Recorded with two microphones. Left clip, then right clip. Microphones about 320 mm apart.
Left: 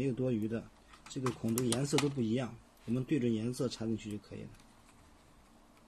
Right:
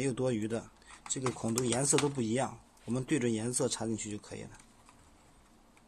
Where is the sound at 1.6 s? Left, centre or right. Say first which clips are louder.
Right 3 dB; right.